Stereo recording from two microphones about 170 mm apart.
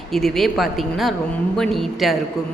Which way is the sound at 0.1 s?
Centre (ahead or behind).